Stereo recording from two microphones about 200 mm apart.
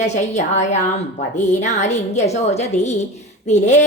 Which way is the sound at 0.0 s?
35° left (ahead or behind).